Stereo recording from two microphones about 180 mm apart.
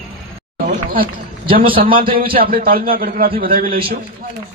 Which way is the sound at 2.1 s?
55° right (ahead or behind).